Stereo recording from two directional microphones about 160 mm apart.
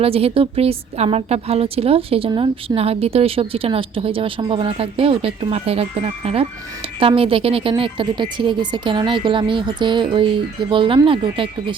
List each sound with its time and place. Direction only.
0.0 s a woman's voice: 35° right (ahead or behind)